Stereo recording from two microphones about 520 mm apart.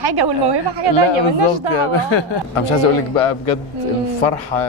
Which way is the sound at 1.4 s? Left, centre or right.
Right.